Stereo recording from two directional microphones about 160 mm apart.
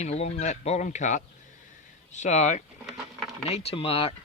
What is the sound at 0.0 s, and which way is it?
Speech, 45° left (ahead or behind).